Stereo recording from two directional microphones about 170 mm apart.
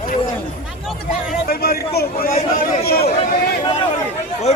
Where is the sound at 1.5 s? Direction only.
65° left (ahead or behind).